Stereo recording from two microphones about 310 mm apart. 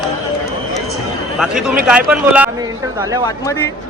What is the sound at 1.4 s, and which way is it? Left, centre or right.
A man's voice, centre.